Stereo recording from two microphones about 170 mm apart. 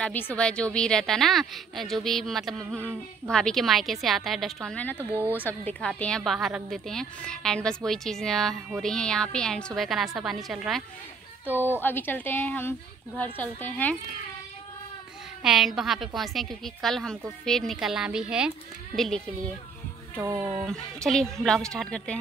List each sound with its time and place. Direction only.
0.0 s a woman's voice: 10° left (ahead or behind)
11.8 s a woman's voice: 10° left (ahead or behind)
15.4 s a woman's voice: centre (ahead or behind)
20.2 s speech: 20° right (ahead or behind)
20.6 s a woman's voice: centre (ahead or behind)